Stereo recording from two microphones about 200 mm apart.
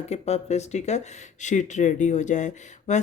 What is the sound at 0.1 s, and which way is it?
Speech, 35° left (ahead or behind).